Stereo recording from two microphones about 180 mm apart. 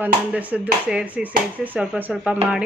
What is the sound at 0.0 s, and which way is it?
A woman's voice, 10° right (ahead or behind).